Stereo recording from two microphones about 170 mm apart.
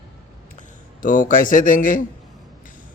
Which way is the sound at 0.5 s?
50° left (ahead or behind).